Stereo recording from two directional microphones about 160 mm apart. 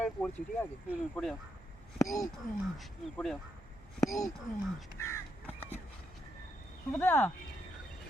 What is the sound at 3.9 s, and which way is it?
Speech, 20° left (ahead or behind).